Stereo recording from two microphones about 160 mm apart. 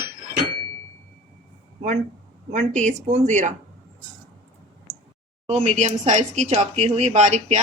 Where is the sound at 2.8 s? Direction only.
50° right (ahead or behind).